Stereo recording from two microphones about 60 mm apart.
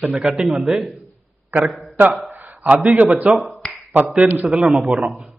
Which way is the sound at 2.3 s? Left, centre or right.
Right.